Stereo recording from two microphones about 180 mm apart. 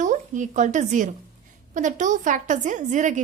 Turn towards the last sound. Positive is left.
turn(degrees=-45)  # may be behind; listen again after turning